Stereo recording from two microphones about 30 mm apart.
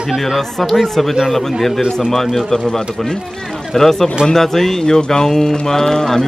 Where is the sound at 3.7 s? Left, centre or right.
Centre.